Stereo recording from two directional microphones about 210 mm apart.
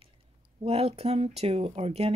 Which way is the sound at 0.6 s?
30° right (ahead or behind).